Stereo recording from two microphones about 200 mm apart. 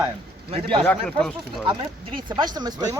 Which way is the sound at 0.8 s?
5° left (ahead or behind).